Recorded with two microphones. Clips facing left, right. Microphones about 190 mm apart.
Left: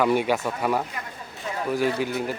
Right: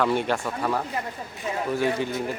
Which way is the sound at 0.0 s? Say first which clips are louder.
Left 2 dB; 10° left (ahead or behind).